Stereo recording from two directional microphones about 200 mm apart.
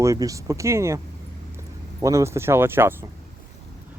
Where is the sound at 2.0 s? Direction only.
15° right (ahead or behind).